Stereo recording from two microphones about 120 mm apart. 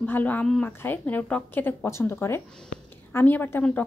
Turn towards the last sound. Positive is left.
turn(degrees=15)  # may be behind; listen again after turning